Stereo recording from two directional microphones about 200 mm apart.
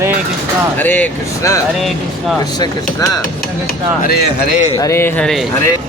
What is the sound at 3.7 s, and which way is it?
Speech, 50° left (ahead or behind).